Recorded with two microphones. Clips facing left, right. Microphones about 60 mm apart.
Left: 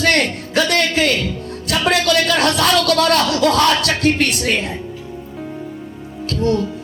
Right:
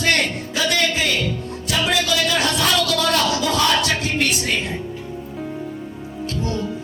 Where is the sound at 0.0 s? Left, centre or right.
Left.